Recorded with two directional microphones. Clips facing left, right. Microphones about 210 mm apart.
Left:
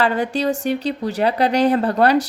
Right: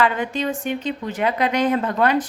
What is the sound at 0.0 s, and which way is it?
Speech, 35° left (ahead or behind).